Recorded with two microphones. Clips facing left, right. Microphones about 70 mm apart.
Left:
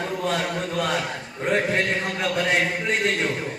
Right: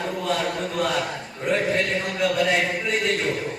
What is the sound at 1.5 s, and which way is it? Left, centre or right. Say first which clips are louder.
A man's voice: even; left.